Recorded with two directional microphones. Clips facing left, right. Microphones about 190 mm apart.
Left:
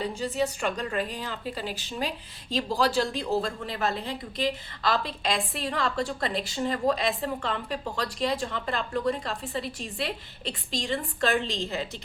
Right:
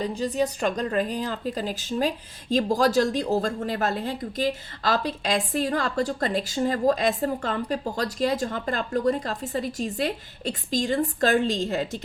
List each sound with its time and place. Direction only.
0.2 s speech: 40° right (ahead or behind)